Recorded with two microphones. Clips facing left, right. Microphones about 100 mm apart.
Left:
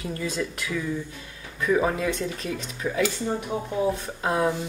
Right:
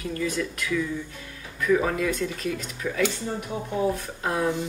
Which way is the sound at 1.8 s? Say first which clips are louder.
Left 1 dB; 25° left (ahead or behind).